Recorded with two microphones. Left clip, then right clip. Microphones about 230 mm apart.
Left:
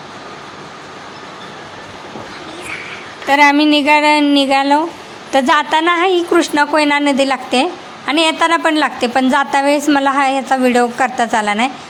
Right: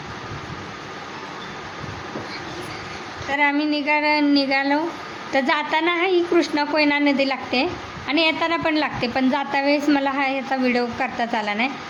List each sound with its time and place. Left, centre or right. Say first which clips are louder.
3.2 s a woman's voice: left 11 dB; left